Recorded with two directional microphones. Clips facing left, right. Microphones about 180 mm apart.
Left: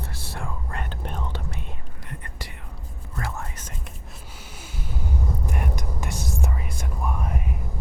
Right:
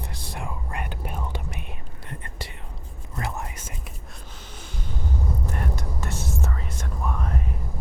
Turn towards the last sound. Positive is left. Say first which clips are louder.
# even
turn(degrees=10)  # may be behind; listen again after turning